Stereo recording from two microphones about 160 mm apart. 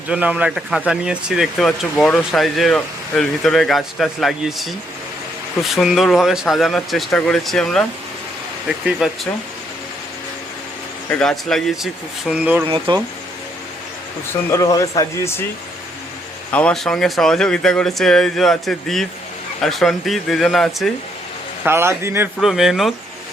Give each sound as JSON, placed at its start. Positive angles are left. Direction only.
{"t": 0.1, "sound": "speech", "side_deg": -10}
{"t": 9.0, "sound": "speech", "side_deg": 0}
{"t": 11.1, "sound": "speech", "side_deg": 5}
{"t": 12.6, "sound": "insect", "side_deg": -35}
{"t": 14.3, "sound": "speech", "side_deg": 20}
{"t": 16.5, "sound": "speech", "side_deg": 10}
{"t": 21.6, "sound": "a man's voice", "side_deg": -15}
{"t": 22.4, "sound": "speech", "side_deg": 0}